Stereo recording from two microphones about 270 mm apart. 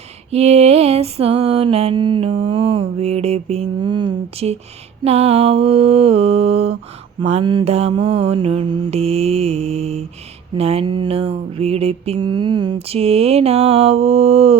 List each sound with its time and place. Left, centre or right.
0.3 s lullaby: right